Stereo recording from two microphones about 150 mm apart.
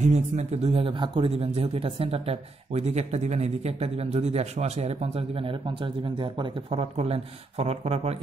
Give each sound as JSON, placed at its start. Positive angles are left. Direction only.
{"t": 0.0, "sound": "a man's voice", "side_deg": -50}